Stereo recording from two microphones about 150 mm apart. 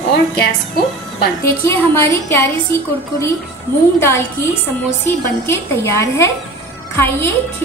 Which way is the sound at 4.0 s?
15° left (ahead or behind).